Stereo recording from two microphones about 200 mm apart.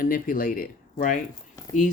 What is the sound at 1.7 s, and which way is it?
Speech, 15° left (ahead or behind).